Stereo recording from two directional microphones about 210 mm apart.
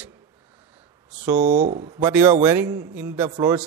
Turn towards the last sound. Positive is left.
turn(degrees=-20)  # may be behind; listen again after turning